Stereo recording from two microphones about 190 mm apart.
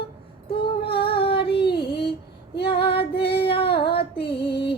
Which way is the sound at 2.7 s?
60° left (ahead or behind).